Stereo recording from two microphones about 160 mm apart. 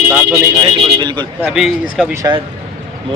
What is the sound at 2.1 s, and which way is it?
Speech, 20° right (ahead or behind).